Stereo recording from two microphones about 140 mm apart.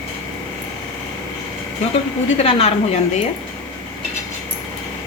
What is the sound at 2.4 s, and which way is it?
Speech, 45° left (ahead or behind).